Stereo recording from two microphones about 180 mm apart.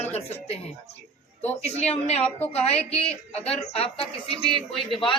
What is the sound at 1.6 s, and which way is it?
Speech, 35° left (ahead or behind).